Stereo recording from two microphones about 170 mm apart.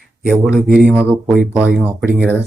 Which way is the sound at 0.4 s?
5° right (ahead or behind).